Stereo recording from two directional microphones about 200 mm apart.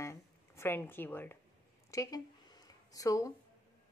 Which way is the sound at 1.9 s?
15° left (ahead or behind).